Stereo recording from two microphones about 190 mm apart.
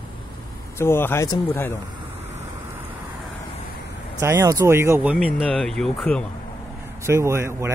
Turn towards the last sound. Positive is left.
turn(degrees=-15)  # may be behind; listen again after turning